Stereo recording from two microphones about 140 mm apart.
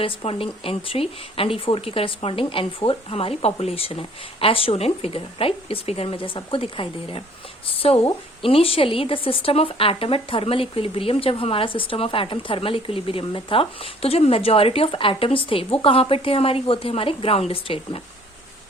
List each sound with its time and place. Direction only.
0.0 s a woman's voice: 40° left (ahead or behind)